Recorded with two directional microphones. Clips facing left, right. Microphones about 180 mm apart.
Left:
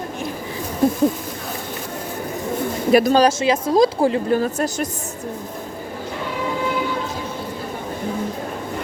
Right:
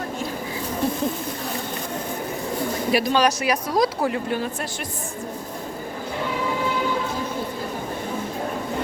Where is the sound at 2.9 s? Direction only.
45° left (ahead or behind).